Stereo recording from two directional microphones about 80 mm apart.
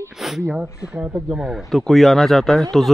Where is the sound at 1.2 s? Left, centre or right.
Centre.